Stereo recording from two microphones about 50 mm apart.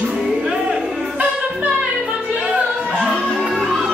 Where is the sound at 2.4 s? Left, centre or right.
Right.